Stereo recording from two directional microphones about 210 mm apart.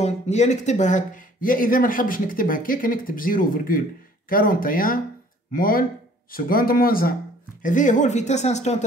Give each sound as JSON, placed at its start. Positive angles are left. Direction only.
{"t": 0.0, "sound": "speech", "side_deg": 35}